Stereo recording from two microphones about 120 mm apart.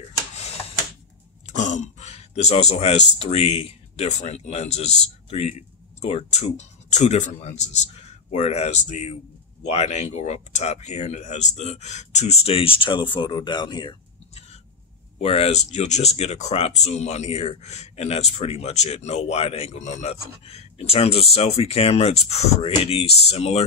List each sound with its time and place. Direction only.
1.5 s a sound: 90° left; by 3.1 s 60° left (ahead or behind)
3.2 s speech: 60° left (ahead or behind); by 7.3 s 80° left
7.3 s a man's voice: 70° left (ahead or behind); by 13.9 s 40° left (ahead or behind)
15.1 s speech: 60° left (ahead or behind)